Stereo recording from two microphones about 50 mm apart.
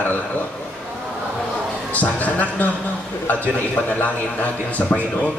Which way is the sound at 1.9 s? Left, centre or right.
Left.